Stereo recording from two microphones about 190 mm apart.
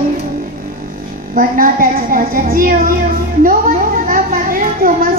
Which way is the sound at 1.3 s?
45° right (ahead or behind).